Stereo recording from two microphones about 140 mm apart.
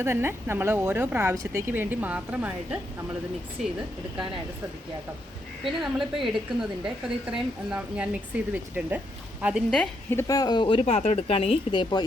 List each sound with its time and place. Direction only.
0.0 s a woman's voice: 15° right (ahead or behind)
5.6 s a woman's voice: centre (ahead or behind)
9.6 s a woman's voice: 5° left (ahead or behind)
10.2 s speech: 25° left (ahead or behind); by 11.5 s 45° left (ahead or behind)
11.7 s speech: 35° left (ahead or behind)